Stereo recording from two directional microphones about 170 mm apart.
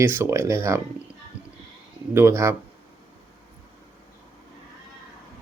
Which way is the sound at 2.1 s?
15° right (ahead or behind).